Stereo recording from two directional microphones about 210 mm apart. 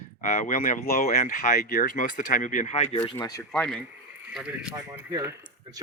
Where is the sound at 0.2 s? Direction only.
40° left (ahead or behind).